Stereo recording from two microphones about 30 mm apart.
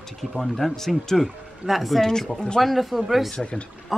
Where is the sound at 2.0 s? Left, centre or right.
Centre.